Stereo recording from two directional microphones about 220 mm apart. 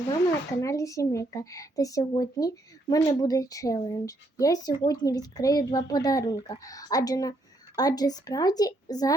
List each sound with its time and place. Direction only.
0.6 s speech: 15° left (ahead or behind)